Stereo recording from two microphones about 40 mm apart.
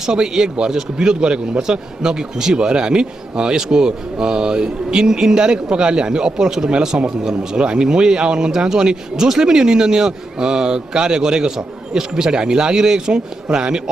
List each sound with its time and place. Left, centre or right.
0.0 s a man's voice: centre